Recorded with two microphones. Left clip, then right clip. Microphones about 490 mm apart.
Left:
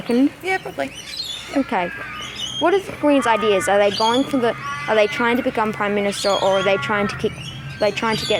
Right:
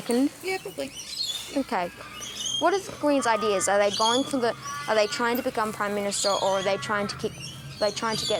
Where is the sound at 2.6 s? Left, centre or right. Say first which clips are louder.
Left 6 dB; right.